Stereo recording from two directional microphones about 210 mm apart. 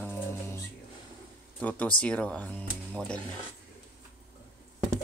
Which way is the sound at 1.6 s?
5° left (ahead or behind).